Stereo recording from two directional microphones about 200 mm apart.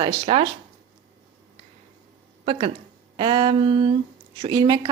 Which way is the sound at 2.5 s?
30° right (ahead or behind).